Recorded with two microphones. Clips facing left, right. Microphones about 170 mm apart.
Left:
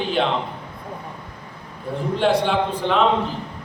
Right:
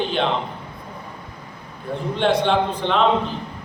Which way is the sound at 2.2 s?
5° left (ahead or behind).